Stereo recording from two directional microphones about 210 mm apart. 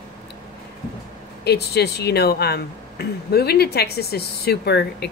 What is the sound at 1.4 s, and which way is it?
Speech, 50° left (ahead or behind).